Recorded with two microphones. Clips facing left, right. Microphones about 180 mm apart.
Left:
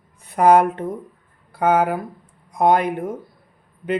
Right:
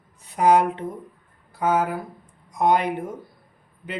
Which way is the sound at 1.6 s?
60° left (ahead or behind).